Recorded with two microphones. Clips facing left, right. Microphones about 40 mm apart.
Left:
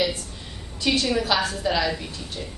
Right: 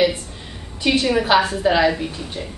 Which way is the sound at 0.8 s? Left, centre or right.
Right.